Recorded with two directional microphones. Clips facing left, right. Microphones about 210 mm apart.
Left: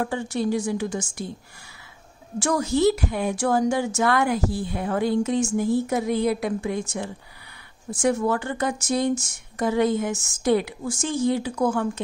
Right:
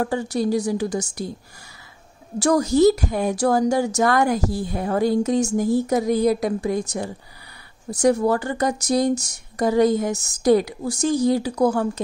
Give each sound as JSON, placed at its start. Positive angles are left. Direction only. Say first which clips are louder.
{"t": 0.0, "sound": "a woman's voice", "louder": "right 3 dB", "side_deg": -40}
{"t": 2.3, "sound": "a woman's voice", "louder": "right 5 dB", "side_deg": -40}